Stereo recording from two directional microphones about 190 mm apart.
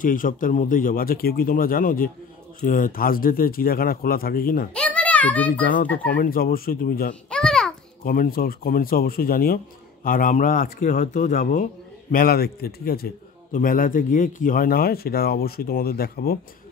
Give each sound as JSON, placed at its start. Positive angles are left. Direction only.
{"t": 0.0, "sound": "a man's voice", "side_deg": 45}
{"t": 4.7, "sound": "a sound", "side_deg": 5}
{"t": 6.1, "sound": "a man's voice", "side_deg": 50}
{"t": 7.2, "sound": "babbling", "side_deg": 5}
{"t": 8.0, "sound": "a man's voice", "side_deg": 50}
{"t": 12.1, "sound": "a man's voice", "side_deg": 50}